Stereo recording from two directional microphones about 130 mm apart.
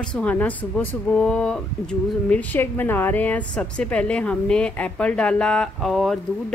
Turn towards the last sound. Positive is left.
turn(degrees=0)  # may be behind; listen again after turning